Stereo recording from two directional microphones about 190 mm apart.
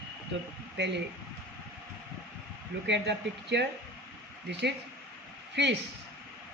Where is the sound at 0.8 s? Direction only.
65° right (ahead or behind).